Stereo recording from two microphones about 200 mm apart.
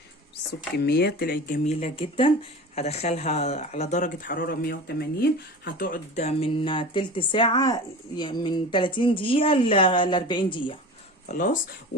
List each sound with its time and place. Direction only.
0.8 s speech: 55° left (ahead or behind); by 10.8 s 25° left (ahead or behind)
11.3 s speech: 40° left (ahead or behind)